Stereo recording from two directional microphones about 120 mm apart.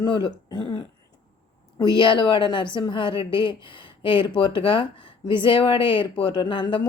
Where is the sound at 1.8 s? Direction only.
45° left (ahead or behind).